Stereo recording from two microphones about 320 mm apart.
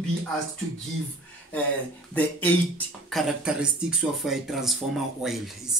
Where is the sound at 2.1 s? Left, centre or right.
Centre.